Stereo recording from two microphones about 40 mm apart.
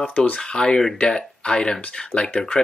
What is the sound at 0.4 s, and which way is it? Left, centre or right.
Speech, centre.